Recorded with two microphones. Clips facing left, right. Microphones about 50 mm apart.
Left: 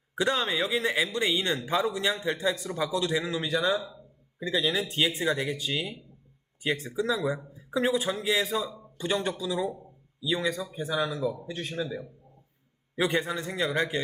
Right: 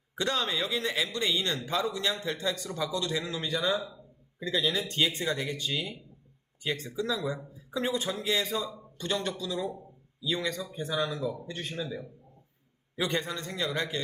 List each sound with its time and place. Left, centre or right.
0.2 s speech: centre
13.0 s speech: centre